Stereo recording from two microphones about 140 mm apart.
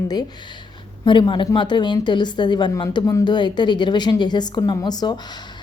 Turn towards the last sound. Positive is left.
turn(degrees=30)  # may be behind; listen again after turning